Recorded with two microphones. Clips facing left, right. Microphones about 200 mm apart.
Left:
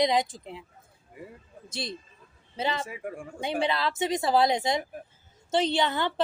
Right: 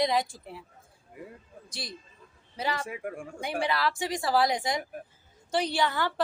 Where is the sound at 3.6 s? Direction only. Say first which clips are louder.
Left 1 dB; 20° left (ahead or behind).